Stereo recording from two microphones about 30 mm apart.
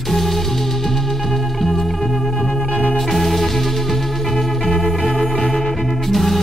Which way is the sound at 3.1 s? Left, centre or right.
Centre.